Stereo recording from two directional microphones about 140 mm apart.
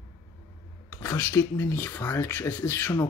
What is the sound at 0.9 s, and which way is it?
Speech, 20° left (ahead or behind).